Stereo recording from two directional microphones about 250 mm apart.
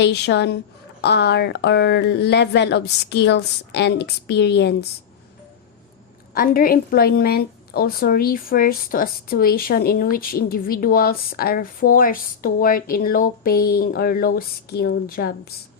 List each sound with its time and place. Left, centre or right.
0.0 s speech: left
6.3 s a woman's voice: left